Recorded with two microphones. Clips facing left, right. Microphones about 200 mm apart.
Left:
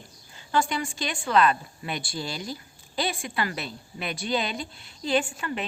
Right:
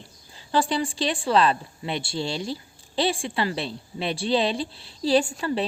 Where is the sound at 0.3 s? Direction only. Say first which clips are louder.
Right 3 dB; 30° right (ahead or behind).